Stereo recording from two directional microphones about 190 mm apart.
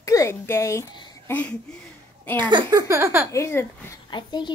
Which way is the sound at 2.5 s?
20° right (ahead or behind).